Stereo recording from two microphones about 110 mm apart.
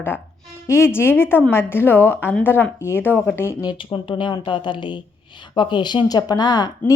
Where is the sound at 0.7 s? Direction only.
20° left (ahead or behind).